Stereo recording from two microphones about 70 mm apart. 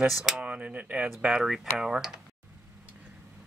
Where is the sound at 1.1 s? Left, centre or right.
Centre.